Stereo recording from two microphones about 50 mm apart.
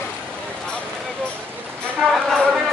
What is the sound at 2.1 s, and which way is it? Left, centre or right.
Speech, centre.